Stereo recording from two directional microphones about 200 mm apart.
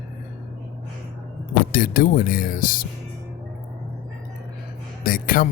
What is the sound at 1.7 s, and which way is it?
Speech, 45° left (ahead or behind).